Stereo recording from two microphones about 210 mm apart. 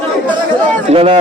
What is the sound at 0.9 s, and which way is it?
Speech, 25° right (ahead or behind).